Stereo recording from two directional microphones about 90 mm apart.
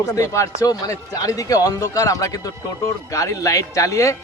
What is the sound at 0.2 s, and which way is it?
A man's voice, 40° left (ahead or behind).